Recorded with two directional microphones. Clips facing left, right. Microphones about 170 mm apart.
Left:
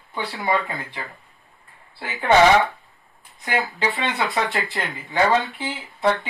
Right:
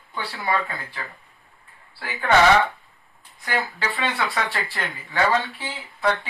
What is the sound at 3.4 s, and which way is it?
Speech, 20° left (ahead or behind).